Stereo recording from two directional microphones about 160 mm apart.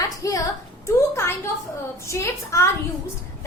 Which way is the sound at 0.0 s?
20° left (ahead or behind).